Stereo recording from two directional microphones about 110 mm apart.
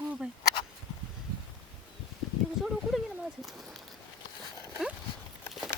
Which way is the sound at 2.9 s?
Centre (ahead or behind).